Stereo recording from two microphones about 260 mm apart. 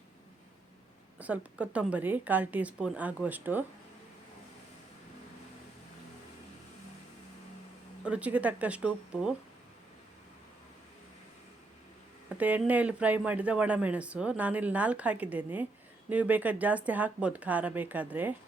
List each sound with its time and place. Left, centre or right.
1.2 s speech: centre
8.0 s speech: centre
12.4 s speech: centre